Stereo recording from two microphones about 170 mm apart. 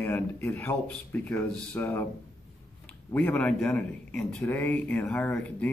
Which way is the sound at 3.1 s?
10° left (ahead or behind).